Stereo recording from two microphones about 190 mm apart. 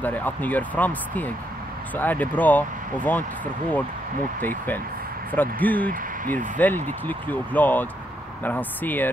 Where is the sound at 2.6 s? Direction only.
45° right (ahead or behind).